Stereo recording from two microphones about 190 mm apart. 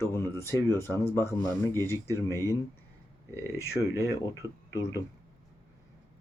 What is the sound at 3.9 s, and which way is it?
Speech, 15° right (ahead or behind).